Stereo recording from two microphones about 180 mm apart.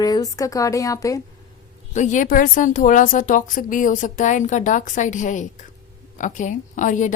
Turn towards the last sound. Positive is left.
turn(degrees=45)  # may be behind; listen again after turning